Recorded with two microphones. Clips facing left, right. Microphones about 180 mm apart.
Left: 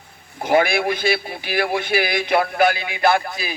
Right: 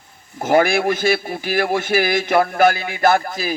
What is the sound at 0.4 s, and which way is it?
A man's voice, 45° right (ahead or behind).